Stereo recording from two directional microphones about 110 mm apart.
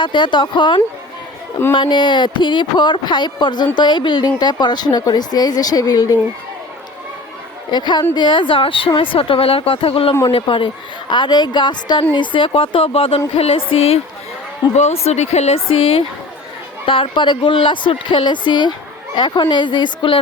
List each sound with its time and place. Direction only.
0.0 s speech: 45° left (ahead or behind)
7.7 s speech: 40° left (ahead or behind); by 14.0 s 60° left (ahead or behind)
14.8 s speech: 80° left; by 20.1 s 45° left (ahead or behind)